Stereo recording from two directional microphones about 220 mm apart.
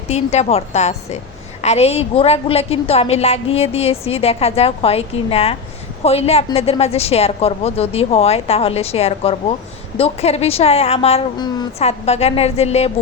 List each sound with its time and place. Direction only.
0.1 s a woman's voice: 30° left (ahead or behind)